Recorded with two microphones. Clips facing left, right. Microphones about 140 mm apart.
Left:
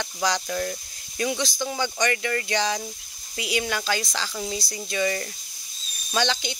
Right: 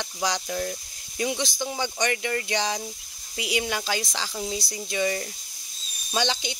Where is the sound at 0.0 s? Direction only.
10° right (ahead or behind).